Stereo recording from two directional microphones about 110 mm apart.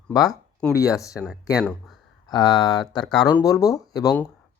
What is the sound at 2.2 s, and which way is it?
Speech, 40° left (ahead or behind).